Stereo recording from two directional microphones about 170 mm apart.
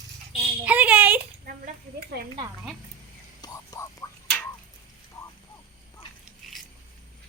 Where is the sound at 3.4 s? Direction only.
20° left (ahead or behind).